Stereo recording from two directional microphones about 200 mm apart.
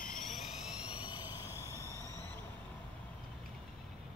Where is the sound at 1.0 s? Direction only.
10° right (ahead or behind).